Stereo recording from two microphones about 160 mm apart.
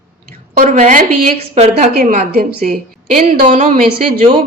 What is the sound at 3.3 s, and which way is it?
Speech, 55° right (ahead or behind).